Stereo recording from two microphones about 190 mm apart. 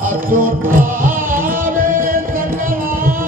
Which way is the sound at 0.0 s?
45° right (ahead or behind).